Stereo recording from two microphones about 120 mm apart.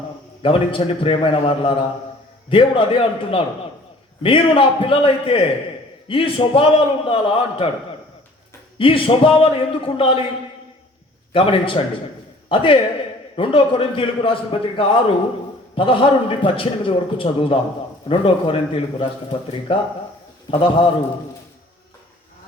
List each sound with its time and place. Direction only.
0.4 s a man's voice: 50° left (ahead or behind)
8.8 s a man's voice: 50° left (ahead or behind)
11.3 s a man's voice: 50° left (ahead or behind)